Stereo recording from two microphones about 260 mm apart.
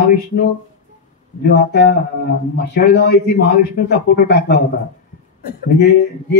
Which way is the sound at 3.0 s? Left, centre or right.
Left.